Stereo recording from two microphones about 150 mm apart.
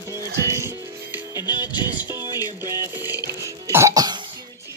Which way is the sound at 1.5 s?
30° left (ahead or behind).